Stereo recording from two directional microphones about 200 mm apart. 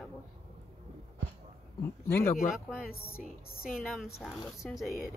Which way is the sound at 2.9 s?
45° left (ahead or behind).